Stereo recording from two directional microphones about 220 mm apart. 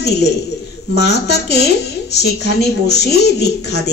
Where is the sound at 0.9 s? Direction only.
50° left (ahead or behind).